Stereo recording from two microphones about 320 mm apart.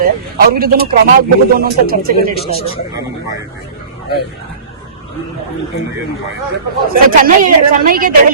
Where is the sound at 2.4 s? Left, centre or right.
Centre.